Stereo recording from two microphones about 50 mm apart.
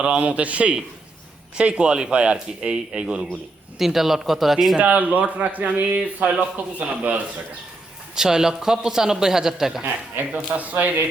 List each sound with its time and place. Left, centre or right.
0.2 s speech: right
3.8 s speech: centre
4.8 s speech: right
8.1 s a man's voice: centre
9.8 s speech: right